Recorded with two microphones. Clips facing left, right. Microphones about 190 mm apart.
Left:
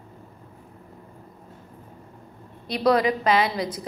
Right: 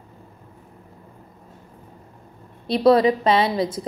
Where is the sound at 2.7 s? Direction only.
25° right (ahead or behind).